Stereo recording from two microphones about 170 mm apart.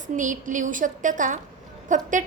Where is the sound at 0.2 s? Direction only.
50° right (ahead or behind).